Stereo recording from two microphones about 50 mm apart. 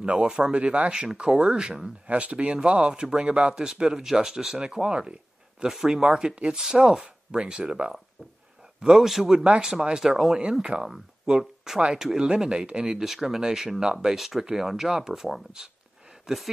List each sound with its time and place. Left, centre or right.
0.0 s speech: centre
9.0 s speech: centre